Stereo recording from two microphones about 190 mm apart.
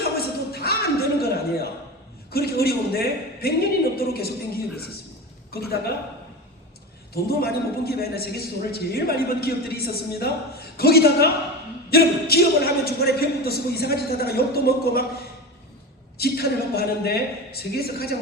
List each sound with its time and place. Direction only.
0.5 s a sound: 55° left (ahead or behind)
2.3 s a man's voice: 55° left (ahead or behind)
5.5 s a woman's voice: 55° left (ahead or behind)
7.1 s a man's voice: 55° left (ahead or behind)
16.1 s a man's voice: 55° left (ahead or behind)